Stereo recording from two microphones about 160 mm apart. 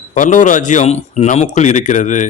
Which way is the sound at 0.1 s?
50° left (ahead or behind).